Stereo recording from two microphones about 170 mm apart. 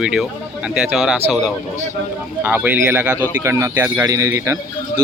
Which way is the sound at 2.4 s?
10° right (ahead or behind).